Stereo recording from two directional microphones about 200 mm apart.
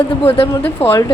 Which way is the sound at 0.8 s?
30° left (ahead or behind).